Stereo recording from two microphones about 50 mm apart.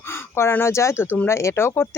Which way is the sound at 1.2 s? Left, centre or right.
Left.